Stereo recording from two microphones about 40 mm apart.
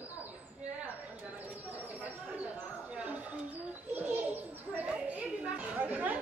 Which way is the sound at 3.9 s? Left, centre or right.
Right.